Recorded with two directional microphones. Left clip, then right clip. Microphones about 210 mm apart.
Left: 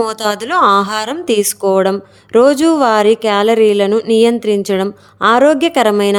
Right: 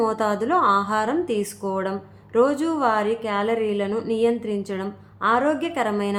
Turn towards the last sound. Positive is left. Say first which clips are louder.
# left 12 dB
turn(degrees=50)  # may be behind; listen again after turning